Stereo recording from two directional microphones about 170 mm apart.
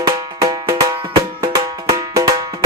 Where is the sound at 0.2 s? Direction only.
25° right (ahead or behind).